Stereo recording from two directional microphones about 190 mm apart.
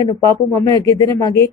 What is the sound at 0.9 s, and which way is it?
Speech, 15° left (ahead or behind).